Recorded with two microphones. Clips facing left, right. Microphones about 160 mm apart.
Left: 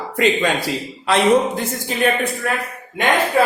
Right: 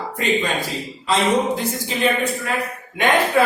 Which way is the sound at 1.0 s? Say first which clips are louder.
Left 3 dB; 65° left (ahead or behind).